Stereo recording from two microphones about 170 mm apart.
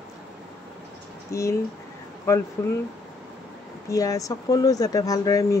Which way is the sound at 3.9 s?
20° left (ahead or behind).